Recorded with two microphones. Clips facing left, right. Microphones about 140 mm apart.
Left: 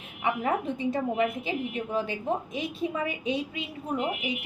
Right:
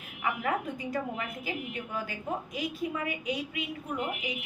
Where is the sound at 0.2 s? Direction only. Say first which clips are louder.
Left 4 dB; 25° left (ahead or behind).